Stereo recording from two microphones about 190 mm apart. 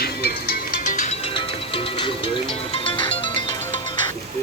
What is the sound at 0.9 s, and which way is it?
Music, 40° left (ahead or behind).